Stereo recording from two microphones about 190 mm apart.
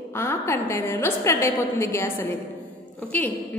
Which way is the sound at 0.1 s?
15° left (ahead or behind).